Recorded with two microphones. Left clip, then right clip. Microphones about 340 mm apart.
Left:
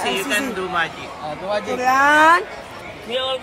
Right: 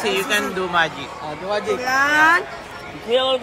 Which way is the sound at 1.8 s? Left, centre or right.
Centre.